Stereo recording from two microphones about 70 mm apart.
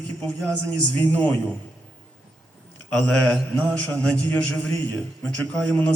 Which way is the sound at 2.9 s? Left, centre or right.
Centre.